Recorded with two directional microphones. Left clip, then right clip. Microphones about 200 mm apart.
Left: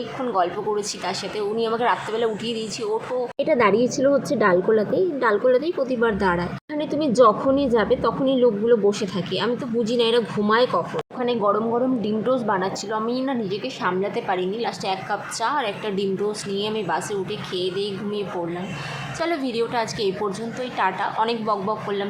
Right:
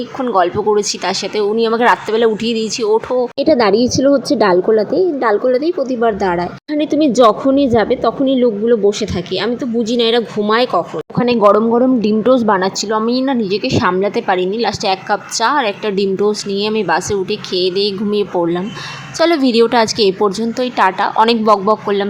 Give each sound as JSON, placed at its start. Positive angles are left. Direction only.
{"t": 0.2, "sound": "a woman's voice", "side_deg": -30}
{"t": 6.7, "sound": "a woman's voice", "side_deg": -30}